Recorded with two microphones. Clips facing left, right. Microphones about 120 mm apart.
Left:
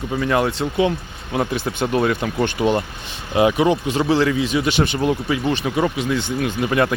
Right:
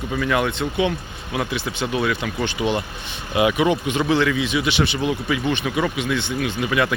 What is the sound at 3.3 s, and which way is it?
Speech, 30° left (ahead or behind).